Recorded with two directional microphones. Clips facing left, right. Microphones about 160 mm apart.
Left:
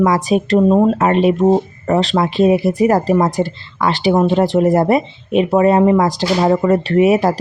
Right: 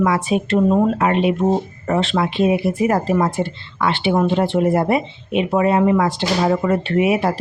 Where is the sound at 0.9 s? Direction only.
40° left (ahead or behind).